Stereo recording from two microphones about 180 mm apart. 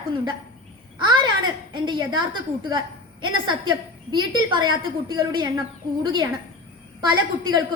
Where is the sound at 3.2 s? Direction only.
25° right (ahead or behind).